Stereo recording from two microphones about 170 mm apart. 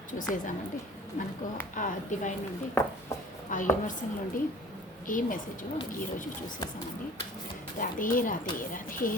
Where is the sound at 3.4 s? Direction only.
50° left (ahead or behind).